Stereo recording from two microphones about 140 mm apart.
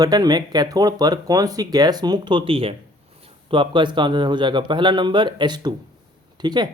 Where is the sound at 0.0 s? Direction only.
30° right (ahead or behind).